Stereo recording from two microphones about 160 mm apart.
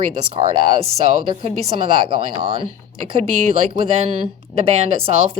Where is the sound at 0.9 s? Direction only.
40° right (ahead or behind).